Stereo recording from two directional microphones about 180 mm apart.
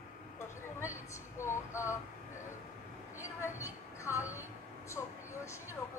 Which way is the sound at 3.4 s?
15° left (ahead or behind).